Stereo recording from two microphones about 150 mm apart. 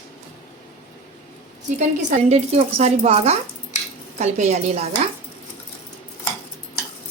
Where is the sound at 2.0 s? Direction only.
50° right (ahead or behind).